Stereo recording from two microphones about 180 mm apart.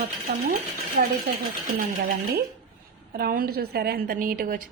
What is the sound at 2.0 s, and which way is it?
A woman's voice, 55° right (ahead or behind).